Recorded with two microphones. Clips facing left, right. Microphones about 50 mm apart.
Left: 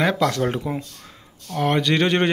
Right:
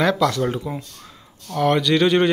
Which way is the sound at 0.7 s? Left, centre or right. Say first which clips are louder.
Left 2 dB; left.